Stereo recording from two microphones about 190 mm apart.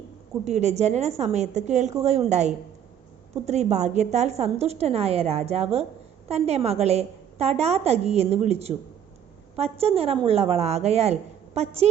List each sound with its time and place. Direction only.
0.4 s a woman's voice: 35° right (ahead or behind)